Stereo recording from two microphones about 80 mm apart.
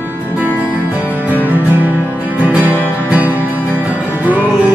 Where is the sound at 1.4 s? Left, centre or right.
Right.